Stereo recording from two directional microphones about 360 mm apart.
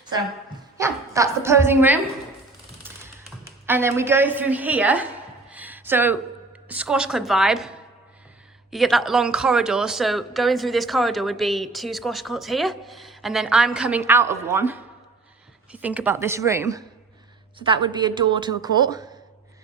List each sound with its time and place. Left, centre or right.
0.8 s speech: centre
3.2 s a woman's voice: centre
5.5 s a sound: centre
6.7 s speech: centre
8.7 s speech: centre